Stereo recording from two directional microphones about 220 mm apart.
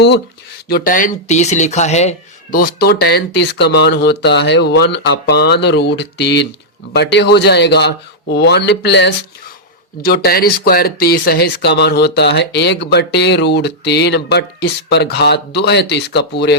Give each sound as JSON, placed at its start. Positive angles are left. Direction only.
{"t": 0.7, "sound": "speech", "side_deg": 40}
{"t": 10.2, "sound": "speech", "side_deg": 45}